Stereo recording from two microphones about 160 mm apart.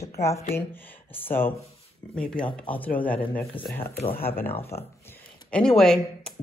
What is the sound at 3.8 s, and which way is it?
Speech, 35° left (ahead or behind).